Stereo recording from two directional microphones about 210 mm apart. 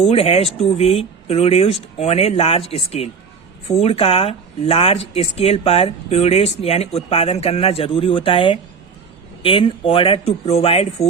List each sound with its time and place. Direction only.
0.1 s speech: 30° left (ahead or behind)